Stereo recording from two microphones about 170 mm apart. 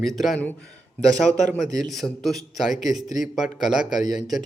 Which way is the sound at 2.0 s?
Centre (ahead or behind).